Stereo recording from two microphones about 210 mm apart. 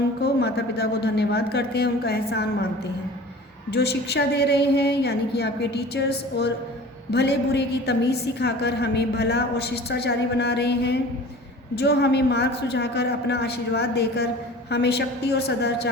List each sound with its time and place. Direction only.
0.2 s a woman's voice: 50° left (ahead or behind)